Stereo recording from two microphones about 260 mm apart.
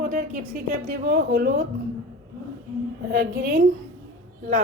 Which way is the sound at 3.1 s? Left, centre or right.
Right.